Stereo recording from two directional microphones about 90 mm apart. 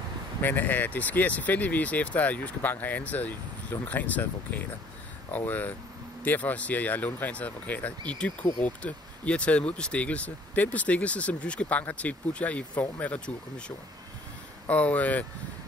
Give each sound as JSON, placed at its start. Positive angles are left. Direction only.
{"t": 0.4, "sound": "speech", "side_deg": 20}